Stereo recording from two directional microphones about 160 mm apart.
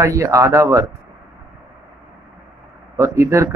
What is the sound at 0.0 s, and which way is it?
Speech, 20° right (ahead or behind).